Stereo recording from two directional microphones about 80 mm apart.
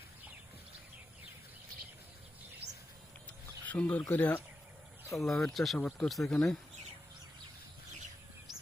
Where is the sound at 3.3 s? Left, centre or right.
Centre.